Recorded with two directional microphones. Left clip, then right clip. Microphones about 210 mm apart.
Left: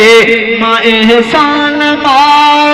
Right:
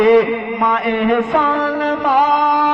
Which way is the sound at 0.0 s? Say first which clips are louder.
Left 8 dB; 30° left (ahead or behind).